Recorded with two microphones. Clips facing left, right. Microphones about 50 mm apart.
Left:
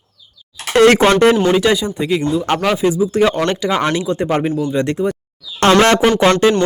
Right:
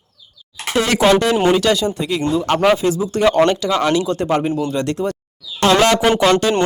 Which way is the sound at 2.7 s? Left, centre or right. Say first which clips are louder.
Left 4 dB; centre.